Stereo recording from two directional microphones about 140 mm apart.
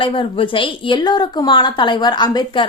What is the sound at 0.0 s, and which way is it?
A woman's voice, 40° left (ahead or behind).